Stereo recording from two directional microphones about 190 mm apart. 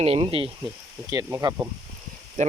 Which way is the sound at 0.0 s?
30° right (ahead or behind).